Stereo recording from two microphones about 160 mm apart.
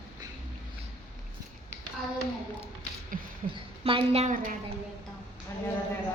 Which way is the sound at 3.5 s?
35° right (ahead or behind).